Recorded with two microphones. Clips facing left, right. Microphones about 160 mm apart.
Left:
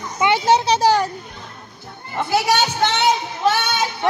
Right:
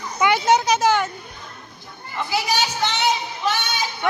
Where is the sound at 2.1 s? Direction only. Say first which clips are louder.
Left 5 dB; 55° left (ahead or behind).